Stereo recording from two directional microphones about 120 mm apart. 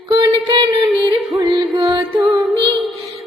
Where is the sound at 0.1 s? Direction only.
40° right (ahead or behind).